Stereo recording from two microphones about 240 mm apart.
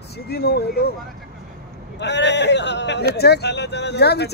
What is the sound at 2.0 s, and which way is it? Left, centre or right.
Speech, left.